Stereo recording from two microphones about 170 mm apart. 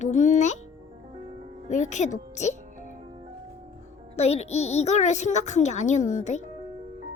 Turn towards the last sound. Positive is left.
turn(degrees=45)  # may be behind; listen again after turning